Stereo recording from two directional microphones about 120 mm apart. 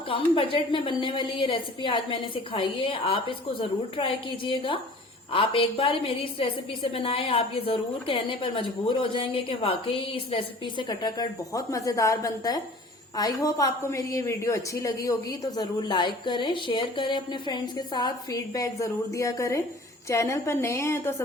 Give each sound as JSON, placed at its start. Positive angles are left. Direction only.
{"t": 0.1, "sound": "a woman's voice", "side_deg": 50}